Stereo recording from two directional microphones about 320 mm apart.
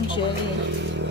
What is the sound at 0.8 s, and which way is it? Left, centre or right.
Vehicle, right.